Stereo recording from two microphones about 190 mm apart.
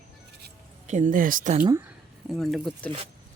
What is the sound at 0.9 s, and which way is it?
Speech, 40° right (ahead or behind).